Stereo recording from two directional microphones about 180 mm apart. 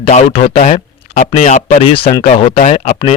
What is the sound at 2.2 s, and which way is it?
Speech, 40° left (ahead or behind).